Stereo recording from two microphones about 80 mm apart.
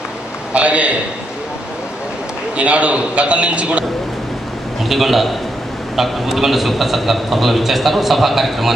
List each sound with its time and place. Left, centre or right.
0.5 s a man's voice: centre
2.5 s a man's voice: centre
4.8 s a man's voice: centre